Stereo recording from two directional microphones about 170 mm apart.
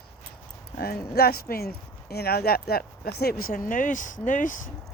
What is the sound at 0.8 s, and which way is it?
Speech, 65° left (ahead or behind).